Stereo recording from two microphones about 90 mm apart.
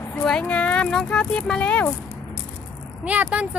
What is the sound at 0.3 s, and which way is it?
Speech, 10° left (ahead or behind).